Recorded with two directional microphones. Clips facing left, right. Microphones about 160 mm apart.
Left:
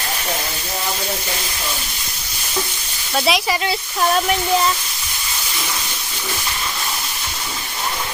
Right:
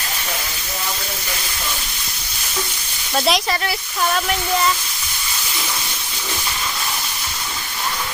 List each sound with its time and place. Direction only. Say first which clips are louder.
3.2 s speech: even; centre (ahead or behind)